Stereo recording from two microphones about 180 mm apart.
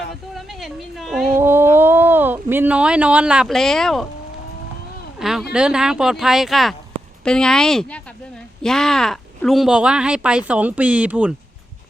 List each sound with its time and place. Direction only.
0.3 s a sound: centre (ahead or behind)
1.4 s speech: 10° right (ahead or behind)
5.2 s speech: centre (ahead or behind)